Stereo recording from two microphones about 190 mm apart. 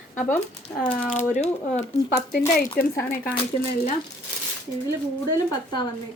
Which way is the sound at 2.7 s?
50° left (ahead or behind).